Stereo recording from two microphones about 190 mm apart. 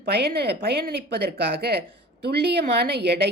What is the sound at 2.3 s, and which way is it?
Speech, 55° right (ahead or behind).